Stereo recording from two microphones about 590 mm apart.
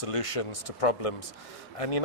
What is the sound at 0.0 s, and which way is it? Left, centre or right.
A man's voice, left.